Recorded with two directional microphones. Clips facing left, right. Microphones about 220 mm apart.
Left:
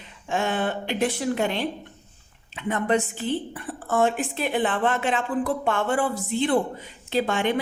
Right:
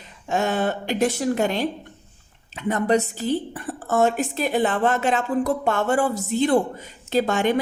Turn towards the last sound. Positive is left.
turn(degrees=-40)  # may be behind; listen again after turning